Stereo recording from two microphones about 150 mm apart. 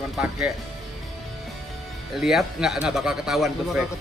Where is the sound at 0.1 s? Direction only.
Centre (ahead or behind).